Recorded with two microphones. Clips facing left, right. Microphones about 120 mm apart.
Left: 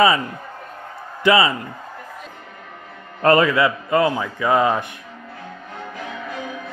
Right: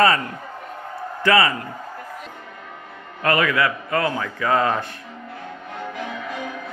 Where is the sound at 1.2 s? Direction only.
20° left (ahead or behind).